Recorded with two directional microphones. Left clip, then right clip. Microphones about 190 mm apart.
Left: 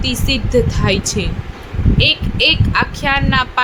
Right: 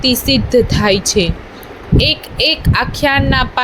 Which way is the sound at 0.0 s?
20° right (ahead or behind).